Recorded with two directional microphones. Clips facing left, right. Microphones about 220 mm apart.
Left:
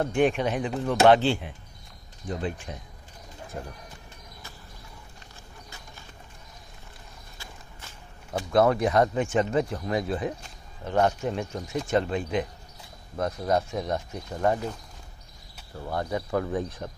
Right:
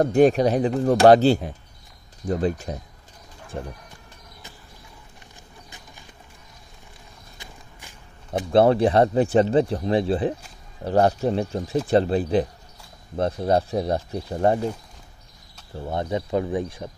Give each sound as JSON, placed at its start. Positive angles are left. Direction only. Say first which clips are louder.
{"t": 0.0, "sound": "speech", "louder": "right 7 dB", "side_deg": -40}
{"t": 3.5, "sound": "speech", "louder": "right 5 dB", "side_deg": -25}
{"t": 8.3, "sound": "speech", "louder": "right 5 dB", "side_deg": -30}
{"t": 15.8, "sound": "speech", "louder": "right 4 dB", "side_deg": -20}